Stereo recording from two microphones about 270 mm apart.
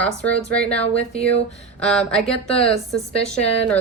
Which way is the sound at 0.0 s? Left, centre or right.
Centre.